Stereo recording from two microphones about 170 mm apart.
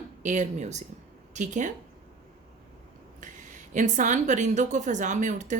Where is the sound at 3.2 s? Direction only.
50° right (ahead or behind).